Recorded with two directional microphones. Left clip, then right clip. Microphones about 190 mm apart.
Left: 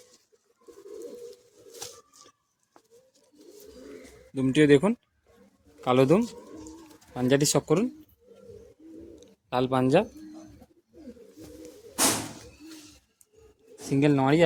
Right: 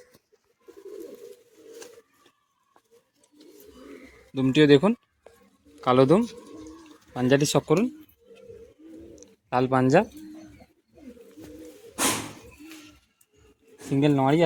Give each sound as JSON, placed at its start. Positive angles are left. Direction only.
{"t": 4.4, "sound": "speech", "side_deg": -25}
{"t": 9.2, "sound": "speech", "side_deg": -25}
{"t": 13.9, "sound": "speech", "side_deg": -20}